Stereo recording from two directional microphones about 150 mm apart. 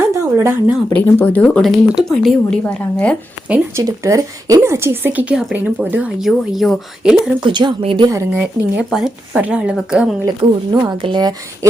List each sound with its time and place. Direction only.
0.0 s a sound: 15° right (ahead or behind)
1.2 s speech: 10° left (ahead or behind)
3.5 s speech: 20° right (ahead or behind); by 7.2 s centre (ahead or behind)
7.4 s speech: 35° right (ahead or behind)
8.0 s speech: 20° right (ahead or behind)
8.4 s speech: 5° right (ahead or behind)
10.7 s speech: 30° right (ahead or behind)